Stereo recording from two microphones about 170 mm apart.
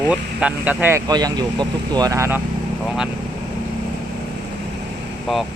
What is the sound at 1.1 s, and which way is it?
Speech, 25° right (ahead or behind).